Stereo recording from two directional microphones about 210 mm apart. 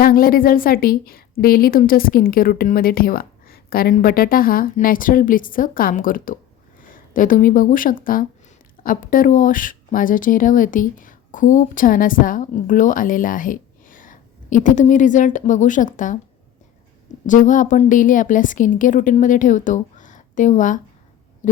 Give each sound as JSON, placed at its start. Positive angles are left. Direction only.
{"t": 0.0, "sound": "a woman's voice", "side_deg": 45}
{"t": 17.2, "sound": "a woman's voice", "side_deg": 35}